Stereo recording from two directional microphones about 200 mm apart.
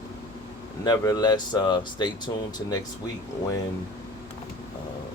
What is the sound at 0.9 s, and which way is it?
Speech, 20° left (ahead or behind).